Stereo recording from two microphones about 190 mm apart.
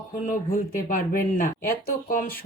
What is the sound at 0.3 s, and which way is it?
Speech, 45° left (ahead or behind).